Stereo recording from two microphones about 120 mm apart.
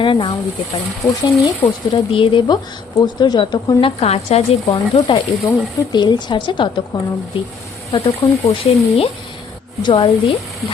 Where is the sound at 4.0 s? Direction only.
60° left (ahead or behind).